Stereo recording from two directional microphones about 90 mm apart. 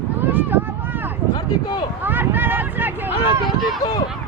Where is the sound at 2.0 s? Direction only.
20° right (ahead or behind).